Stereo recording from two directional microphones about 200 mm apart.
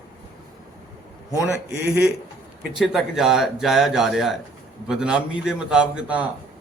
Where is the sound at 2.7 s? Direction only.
Centre (ahead or behind).